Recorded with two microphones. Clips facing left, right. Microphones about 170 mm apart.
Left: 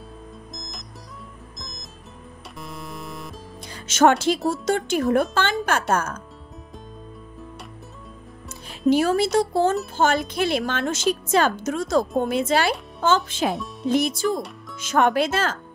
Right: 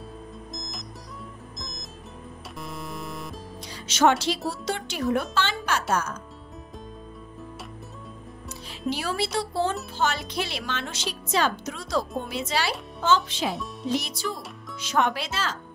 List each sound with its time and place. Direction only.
2.6 s music: centre (ahead or behind)
3.7 s speech: 50° left (ahead or behind)
8.6 s speech: 50° left (ahead or behind)